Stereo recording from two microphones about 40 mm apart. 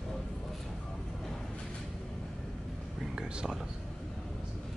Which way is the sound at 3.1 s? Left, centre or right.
Centre.